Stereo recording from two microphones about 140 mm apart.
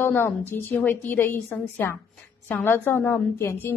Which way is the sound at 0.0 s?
15° left (ahead or behind).